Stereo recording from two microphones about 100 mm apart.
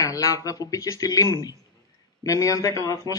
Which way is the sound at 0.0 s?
35° left (ahead or behind).